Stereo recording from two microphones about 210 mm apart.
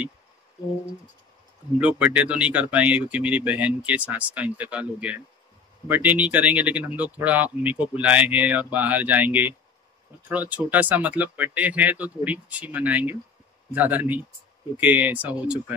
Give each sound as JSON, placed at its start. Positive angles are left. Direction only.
{"t": 1.8, "sound": "speech", "side_deg": -5}